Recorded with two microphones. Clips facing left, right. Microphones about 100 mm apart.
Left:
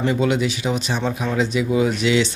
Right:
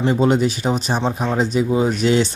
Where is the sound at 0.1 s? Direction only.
40° right (ahead or behind).